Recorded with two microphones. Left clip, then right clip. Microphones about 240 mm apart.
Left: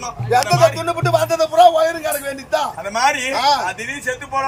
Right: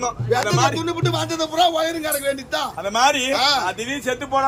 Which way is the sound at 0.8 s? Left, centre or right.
Centre.